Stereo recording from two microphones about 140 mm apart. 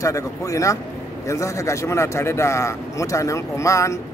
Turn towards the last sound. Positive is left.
turn(degrees=20)  # may be behind; listen again after turning